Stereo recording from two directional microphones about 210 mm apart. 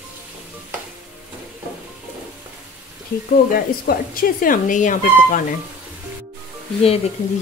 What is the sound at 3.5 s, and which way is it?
Speech, 45° left (ahead or behind).